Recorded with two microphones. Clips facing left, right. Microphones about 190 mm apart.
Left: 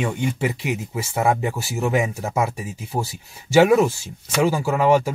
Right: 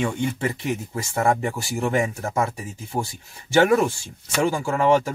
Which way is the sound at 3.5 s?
5° left (ahead or behind).